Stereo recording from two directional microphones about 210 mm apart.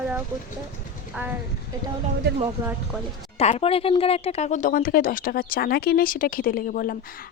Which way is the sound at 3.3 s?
30° left (ahead or behind).